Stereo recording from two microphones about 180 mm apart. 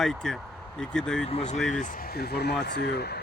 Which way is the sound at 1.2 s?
35° left (ahead or behind).